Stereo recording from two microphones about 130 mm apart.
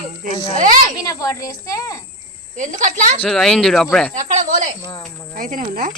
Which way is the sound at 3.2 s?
5° left (ahead or behind).